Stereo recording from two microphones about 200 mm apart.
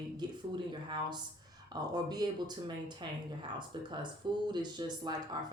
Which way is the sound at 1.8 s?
20° right (ahead or behind).